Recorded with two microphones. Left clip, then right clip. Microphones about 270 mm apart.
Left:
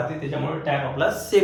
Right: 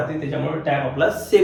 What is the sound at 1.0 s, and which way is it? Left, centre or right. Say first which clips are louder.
Speech: right 3 dB; centre.